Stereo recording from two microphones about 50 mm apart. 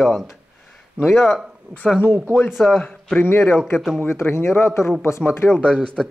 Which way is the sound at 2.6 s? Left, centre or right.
Centre.